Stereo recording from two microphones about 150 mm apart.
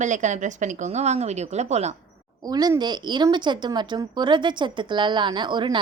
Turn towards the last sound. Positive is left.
turn(degrees=-30)  # may be behind; listen again after turning